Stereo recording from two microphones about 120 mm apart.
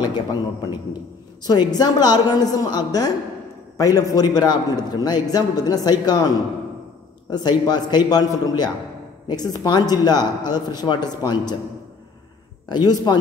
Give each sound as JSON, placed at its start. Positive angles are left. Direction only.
{"t": 0.0, "sound": "a man's voice", "side_deg": 35}
{"t": 12.6, "sound": "a man's voice", "side_deg": 35}